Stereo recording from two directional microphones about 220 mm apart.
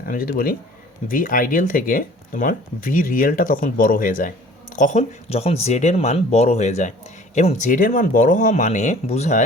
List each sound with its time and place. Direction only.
0.0 s speech: 40° left (ahead or behind)